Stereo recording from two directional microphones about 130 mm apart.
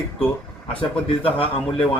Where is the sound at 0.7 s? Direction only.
45° left (ahead or behind).